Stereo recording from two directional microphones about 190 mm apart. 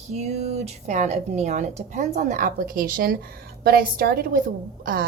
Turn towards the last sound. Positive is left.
turn(degrees=-50)  # may be behind; listen again after turning